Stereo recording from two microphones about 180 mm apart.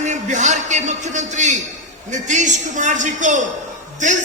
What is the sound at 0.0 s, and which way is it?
A man's voice, 40° right (ahead or behind).